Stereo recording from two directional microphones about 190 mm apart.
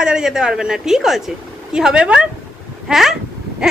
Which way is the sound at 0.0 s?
5° right (ahead or behind).